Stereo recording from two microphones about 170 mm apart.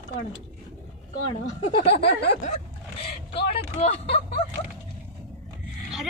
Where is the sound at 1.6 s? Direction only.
35° left (ahead or behind).